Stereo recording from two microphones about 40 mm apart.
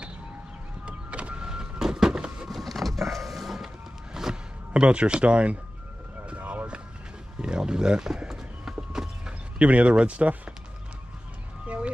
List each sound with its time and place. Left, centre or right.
0.8 s power windows: right
1.8 s vehicle: centre
2.5 s vehicle: centre
4.8 s speech: right
6.3 s a sound: right
7.4 s speech: right
8.2 s a sound: centre
9.6 s speech: right
11.6 s a sound: right